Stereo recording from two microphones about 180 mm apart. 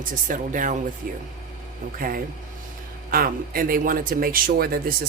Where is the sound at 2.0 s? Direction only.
55° right (ahead or behind).